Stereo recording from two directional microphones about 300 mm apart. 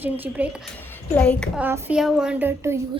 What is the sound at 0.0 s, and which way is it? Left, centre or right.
A woman's voice, centre.